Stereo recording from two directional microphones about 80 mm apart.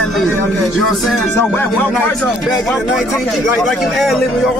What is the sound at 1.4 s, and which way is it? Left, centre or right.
Speech, left.